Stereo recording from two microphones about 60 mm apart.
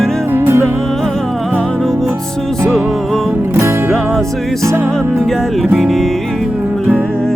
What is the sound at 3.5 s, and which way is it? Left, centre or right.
Music, right.